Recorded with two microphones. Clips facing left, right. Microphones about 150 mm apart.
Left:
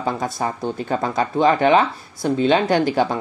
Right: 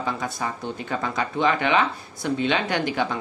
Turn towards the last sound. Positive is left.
turn(degrees=40)  # may be behind; listen again after turning